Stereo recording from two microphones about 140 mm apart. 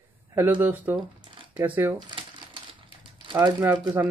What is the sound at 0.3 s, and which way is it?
Speech, 15° right (ahead or behind).